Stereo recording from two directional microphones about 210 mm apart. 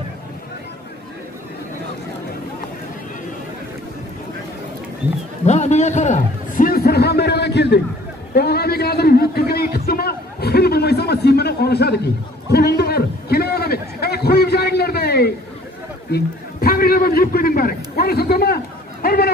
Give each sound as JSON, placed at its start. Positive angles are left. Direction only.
{"t": 5.4, "sound": "a sound", "side_deg": 30}
{"t": 8.4, "sound": "a man's voice", "side_deg": 50}
{"t": 16.6, "sound": "a man's voice", "side_deg": 45}